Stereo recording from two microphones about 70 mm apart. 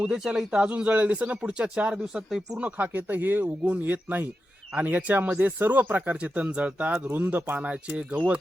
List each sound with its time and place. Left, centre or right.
0.0 s speech: centre